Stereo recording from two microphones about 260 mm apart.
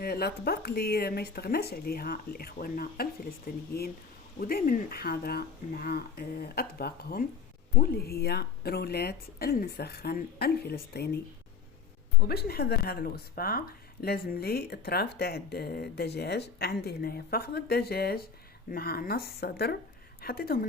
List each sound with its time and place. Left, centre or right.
0.0 s speech: left
12.2 s speech: left